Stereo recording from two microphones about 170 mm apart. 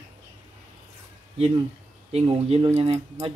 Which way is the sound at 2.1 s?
35° right (ahead or behind).